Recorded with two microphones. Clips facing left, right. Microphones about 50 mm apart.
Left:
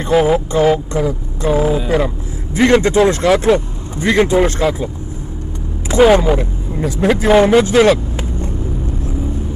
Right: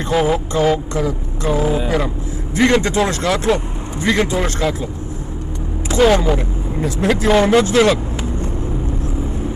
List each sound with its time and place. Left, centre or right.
0.0 s speech: centre
5.9 s speech: centre